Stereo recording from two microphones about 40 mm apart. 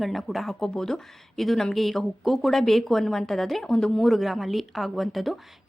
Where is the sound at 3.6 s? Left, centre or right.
Centre.